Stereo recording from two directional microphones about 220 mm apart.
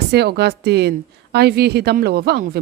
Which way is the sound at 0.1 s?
50° right (ahead or behind).